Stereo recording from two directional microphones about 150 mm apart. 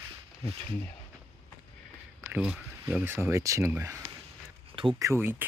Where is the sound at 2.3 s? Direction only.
5° right (ahead or behind).